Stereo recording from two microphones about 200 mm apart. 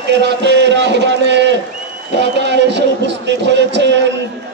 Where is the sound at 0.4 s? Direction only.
60° right (ahead or behind).